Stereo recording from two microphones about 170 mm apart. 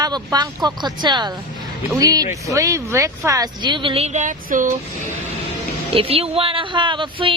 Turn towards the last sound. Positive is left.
turn(degrees=-30)  # may be behind; listen again after turning